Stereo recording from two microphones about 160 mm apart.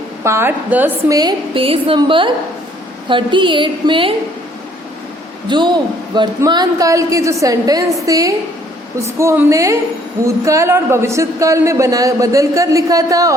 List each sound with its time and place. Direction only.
0.3 s a man's voice: 15° right (ahead or behind); by 4.1 s 30° right (ahead or behind)
5.5 s a man's voice: 30° right (ahead or behind)